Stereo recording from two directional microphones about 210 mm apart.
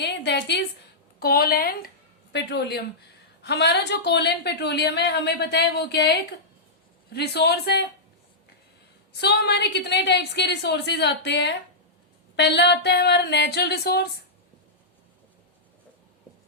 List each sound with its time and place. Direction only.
0.0 s a woman's voice: 55° left (ahead or behind)
9.1 s a woman's voice: 50° left (ahead or behind)